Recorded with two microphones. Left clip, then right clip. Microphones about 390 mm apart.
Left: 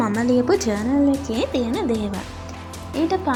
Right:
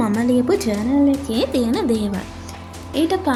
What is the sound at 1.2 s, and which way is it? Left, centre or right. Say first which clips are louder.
A woman's voice: right 3 dB; right.